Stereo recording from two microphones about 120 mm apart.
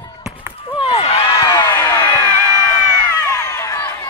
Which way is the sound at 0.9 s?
60° left (ahead or behind).